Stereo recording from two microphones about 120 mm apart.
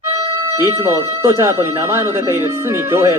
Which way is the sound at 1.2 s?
20° right (ahead or behind).